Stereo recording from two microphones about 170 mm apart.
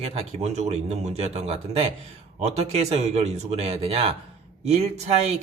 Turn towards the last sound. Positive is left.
turn(degrees=-40)  # may be behind; listen again after turning